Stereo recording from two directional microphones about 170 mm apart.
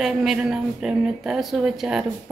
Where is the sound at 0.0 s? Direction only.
Centre (ahead or behind).